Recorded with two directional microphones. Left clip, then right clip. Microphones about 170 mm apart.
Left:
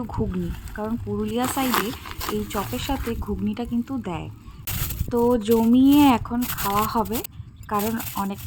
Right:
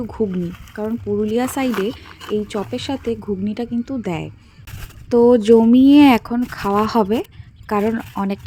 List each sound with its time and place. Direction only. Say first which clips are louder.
0.8 s speech: right 7 dB; 20° right (ahead or behind)